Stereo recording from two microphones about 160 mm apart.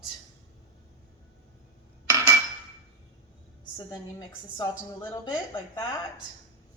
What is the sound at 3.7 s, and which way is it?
Speech, 20° left (ahead or behind).